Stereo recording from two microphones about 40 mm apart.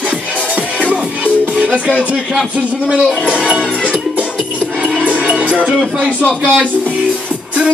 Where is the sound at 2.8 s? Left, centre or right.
Right.